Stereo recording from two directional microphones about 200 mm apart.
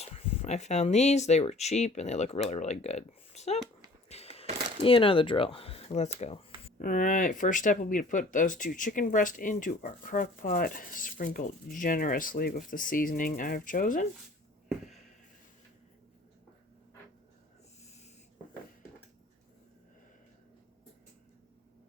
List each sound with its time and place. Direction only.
0.0 s speech: 30° left (ahead or behind)
4.1 s a sound: 30° left (ahead or behind)
4.8 s speech: 25° left (ahead or behind)
6.7 s speech: 40° left (ahead or behind)